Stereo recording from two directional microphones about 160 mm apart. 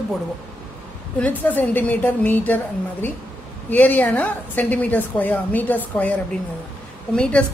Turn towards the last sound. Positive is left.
turn(degrees=5)  # may be behind; listen again after turning